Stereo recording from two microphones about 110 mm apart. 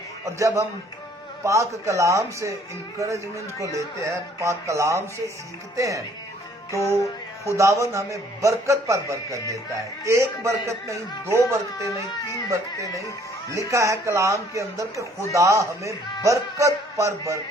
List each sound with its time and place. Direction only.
0.3 s speech: 30° right (ahead or behind)
6.7 s music: 25° left (ahead or behind)
7.4 s speech: 25° right (ahead or behind)
13.5 s speech: 30° right (ahead or behind)